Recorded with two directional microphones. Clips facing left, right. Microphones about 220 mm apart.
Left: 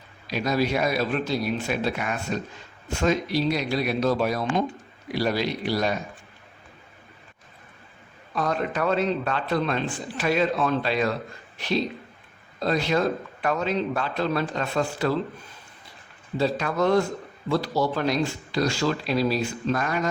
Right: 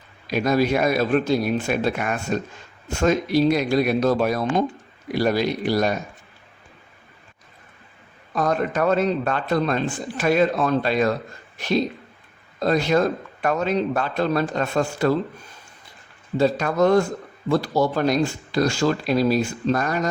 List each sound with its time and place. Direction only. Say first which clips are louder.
0.3 s a man's voice: right 5 dB; 50° right (ahead or behind)
8.4 s a man's voice: right 4 dB; 45° right (ahead or behind)
16.4 s a man's voice: right 5 dB; 45° right (ahead or behind)